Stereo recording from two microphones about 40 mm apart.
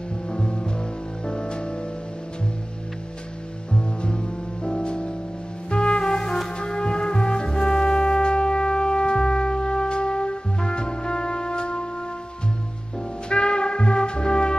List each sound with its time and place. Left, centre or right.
0.3 s music: left
3.7 s music: left
13.3 s music: left